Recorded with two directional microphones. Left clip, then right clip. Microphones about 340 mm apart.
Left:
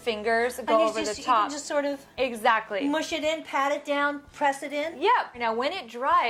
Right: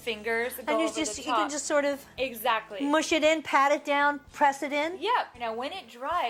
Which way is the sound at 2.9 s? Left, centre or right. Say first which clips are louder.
Right 7 dB; right.